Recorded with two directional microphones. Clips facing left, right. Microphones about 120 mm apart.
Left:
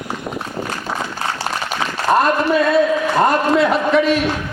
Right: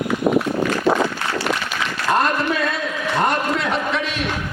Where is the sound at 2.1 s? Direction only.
30° left (ahead or behind).